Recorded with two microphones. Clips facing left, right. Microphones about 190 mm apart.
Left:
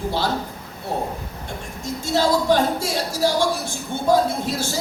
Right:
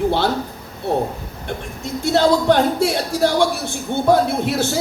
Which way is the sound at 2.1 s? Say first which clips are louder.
Right 3 dB; 65° right (ahead or behind).